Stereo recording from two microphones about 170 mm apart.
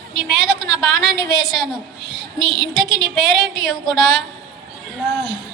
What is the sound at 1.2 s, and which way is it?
Speech, 25° left (ahead or behind).